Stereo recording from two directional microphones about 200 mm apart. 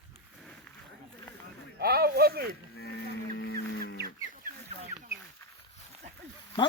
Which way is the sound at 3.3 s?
60° left (ahead or behind).